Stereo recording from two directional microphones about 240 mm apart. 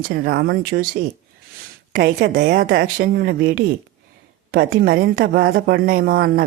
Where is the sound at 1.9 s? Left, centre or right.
Right.